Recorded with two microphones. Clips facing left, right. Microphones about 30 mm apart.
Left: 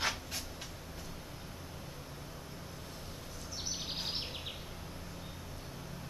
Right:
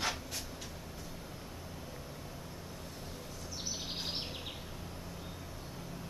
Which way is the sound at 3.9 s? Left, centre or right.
Centre.